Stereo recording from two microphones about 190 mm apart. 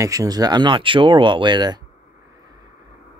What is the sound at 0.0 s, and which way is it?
Speech, 15° right (ahead or behind).